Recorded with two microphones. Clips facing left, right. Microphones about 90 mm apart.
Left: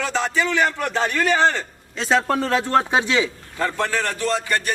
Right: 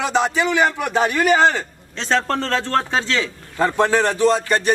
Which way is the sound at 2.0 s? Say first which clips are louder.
Left 1 dB; 5° left (ahead or behind).